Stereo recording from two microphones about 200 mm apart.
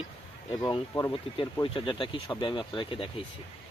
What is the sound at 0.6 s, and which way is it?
Speech, 15° left (ahead or behind).